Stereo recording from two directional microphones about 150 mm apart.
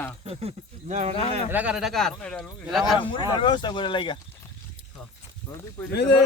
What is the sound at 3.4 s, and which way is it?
Speech, 30° left (ahead or behind).